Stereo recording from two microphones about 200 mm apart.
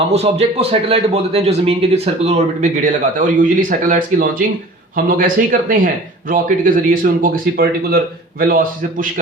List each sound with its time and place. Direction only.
0.1 s speech: 30° right (ahead or behind)